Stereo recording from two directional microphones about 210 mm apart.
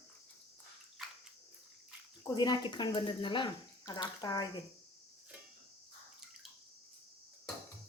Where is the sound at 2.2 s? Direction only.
20° left (ahead or behind).